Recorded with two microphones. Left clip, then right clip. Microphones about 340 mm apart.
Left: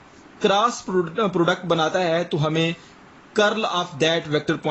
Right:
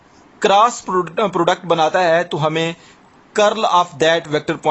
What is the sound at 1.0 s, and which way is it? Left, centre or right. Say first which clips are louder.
A man's voice: right 4 dB; centre.